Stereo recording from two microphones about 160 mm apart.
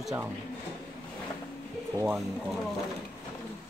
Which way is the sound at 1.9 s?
15° right (ahead or behind).